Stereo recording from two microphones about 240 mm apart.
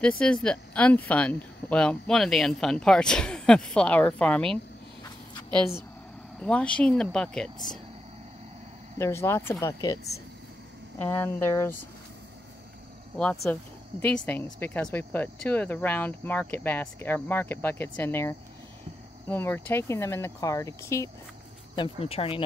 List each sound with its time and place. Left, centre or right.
0.2 s speech: centre
6.4 s speech: centre
8.9 s speech: centre
13.2 s speech: centre
21.7 s speech: left